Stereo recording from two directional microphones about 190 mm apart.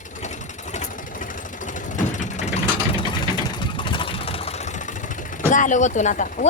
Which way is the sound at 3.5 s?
25° left (ahead or behind).